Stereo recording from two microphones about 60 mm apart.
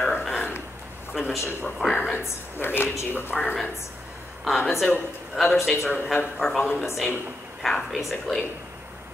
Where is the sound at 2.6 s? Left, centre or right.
Left.